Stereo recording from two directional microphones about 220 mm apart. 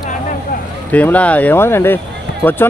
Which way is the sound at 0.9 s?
5° left (ahead or behind).